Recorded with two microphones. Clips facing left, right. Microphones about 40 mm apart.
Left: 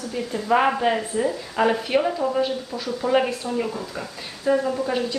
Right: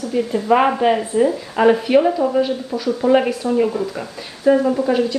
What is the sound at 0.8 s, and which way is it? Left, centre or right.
Speech, centre.